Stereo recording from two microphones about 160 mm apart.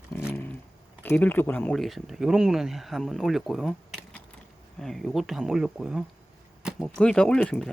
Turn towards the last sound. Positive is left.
turn(degrees=10)  # may be behind; listen again after turning